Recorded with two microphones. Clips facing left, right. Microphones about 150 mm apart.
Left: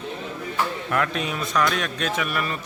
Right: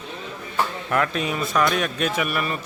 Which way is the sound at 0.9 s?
Centre (ahead or behind).